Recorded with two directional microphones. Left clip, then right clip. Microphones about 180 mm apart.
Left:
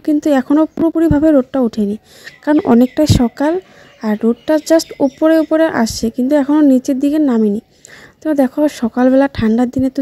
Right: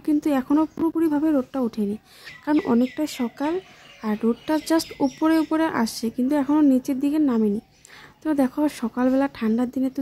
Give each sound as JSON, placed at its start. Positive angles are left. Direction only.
{"t": 0.0, "sound": "speech", "side_deg": 25}